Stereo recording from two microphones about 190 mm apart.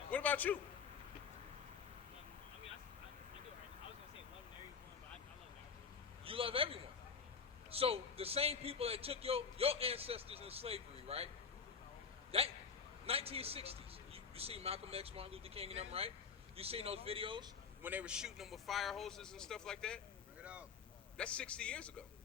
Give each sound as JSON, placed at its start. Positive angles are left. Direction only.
{"t": 0.1, "sound": "a sound", "side_deg": 10}
{"t": 6.2, "sound": "a man's voice", "side_deg": -30}
{"t": 12.3, "sound": "a man's voice", "side_deg": -30}
{"t": 17.8, "sound": "speech", "side_deg": -5}
{"t": 20.4, "sound": "boat", "side_deg": -5}
{"t": 21.2, "sound": "speech", "side_deg": 5}